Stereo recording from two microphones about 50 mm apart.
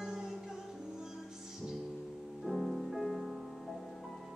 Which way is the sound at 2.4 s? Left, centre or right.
Centre.